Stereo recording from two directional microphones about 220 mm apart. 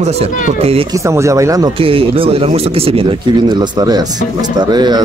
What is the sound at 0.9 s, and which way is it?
Speech, 15° right (ahead or behind).